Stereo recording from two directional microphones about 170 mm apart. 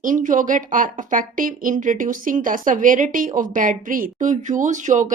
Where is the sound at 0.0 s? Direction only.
50° right (ahead or behind).